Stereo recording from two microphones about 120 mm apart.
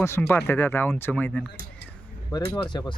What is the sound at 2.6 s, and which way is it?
Speech, 40° left (ahead or behind).